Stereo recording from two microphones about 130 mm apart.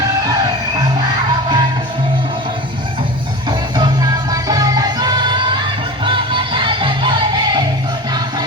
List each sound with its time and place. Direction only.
0.8 s music: 30° right (ahead or behind)
3.8 s music: 30° right (ahead or behind)